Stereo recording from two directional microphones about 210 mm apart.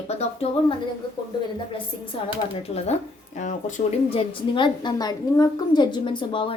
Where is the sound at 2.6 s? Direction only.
30° left (ahead or behind).